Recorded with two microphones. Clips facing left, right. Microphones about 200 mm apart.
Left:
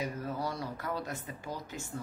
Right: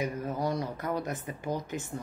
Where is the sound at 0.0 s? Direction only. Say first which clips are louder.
Right 4 dB; 20° right (ahead or behind).